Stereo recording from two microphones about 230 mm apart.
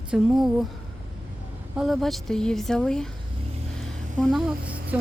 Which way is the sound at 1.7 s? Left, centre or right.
Centre.